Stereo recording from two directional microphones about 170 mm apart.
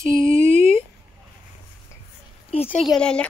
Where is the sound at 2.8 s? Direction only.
Centre (ahead or behind).